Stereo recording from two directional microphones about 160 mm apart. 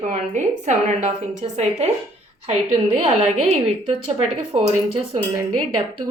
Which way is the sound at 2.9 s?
35° right (ahead or behind).